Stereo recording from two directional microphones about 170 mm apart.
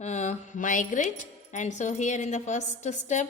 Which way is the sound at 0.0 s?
40° left (ahead or behind).